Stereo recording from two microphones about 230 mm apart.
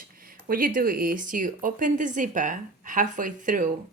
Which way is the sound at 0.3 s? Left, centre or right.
Right.